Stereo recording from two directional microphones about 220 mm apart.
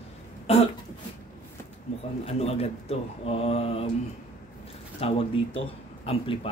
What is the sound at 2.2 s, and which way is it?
Speech, 25° left (ahead or behind).